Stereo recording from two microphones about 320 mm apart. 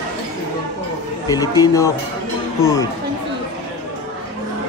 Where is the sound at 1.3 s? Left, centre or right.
Centre.